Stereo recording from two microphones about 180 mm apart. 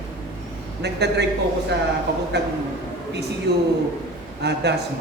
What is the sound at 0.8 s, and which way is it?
Speech, 70° right (ahead or behind).